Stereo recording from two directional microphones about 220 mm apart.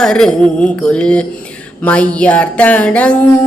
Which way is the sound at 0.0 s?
5° left (ahead or behind).